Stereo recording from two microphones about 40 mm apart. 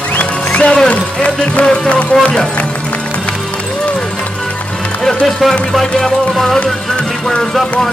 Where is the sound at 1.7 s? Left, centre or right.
Left.